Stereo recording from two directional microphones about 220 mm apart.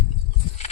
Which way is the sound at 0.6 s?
30° left (ahead or behind).